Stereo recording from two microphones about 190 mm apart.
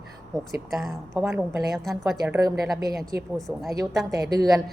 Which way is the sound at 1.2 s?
15° right (ahead or behind).